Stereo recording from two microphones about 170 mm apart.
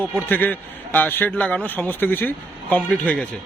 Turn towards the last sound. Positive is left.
turn(degrees=5)  # may be behind; listen again after turning